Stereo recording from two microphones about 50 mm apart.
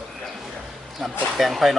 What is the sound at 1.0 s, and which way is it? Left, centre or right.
Speech, centre.